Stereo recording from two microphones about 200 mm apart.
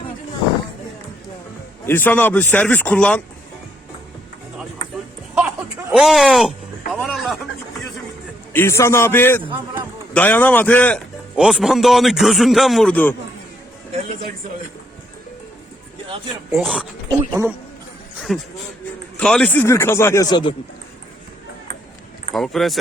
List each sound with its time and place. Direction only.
1.9 s speech: 10° left (ahead or behind)
5.3 s a sound: 5° right (ahead or behind)
8.5 s speech: 15° left (ahead or behind)
16.0 s a sound: 25° right (ahead or behind)
16.6 s speech: centre (ahead or behind)
17.1 s speech: 15° right (ahead or behind)
18.3 s speech: centre (ahead or behind); by 20.6 s 25° left (ahead or behind)
22.3 s speech: centre (ahead or behind)